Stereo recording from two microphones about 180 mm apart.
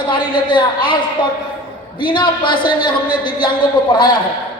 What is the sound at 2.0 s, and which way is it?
A man's voice, 25° left (ahead or behind).